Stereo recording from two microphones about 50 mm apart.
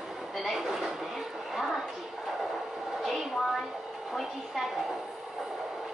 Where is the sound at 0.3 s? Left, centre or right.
Centre.